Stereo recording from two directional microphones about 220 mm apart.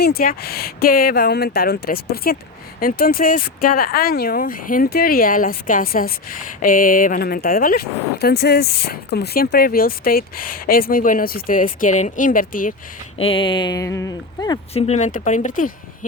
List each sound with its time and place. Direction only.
0.0 s speech: 40° left (ahead or behind)
13.1 s speech: 25° left (ahead or behind)
14.7 s speech: 30° left (ahead or behind)